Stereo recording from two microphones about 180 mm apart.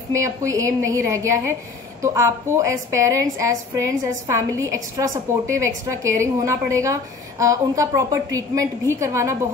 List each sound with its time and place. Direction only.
0.1 s a woman's voice: 15° right (ahead or behind)